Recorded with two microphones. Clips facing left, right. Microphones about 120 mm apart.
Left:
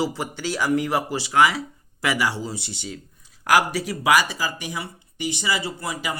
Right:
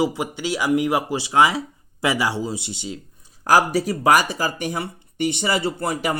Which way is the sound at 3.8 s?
50° right (ahead or behind).